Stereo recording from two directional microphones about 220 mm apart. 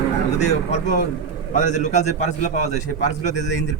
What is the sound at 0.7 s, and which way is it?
A man's voice, 35° left (ahead or behind).